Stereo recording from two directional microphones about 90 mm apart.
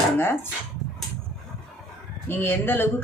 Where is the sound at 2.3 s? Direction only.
25° left (ahead or behind).